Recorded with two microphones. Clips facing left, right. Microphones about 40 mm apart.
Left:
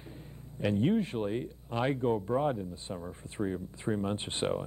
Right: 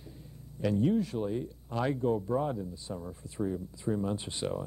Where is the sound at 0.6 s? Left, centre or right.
Left.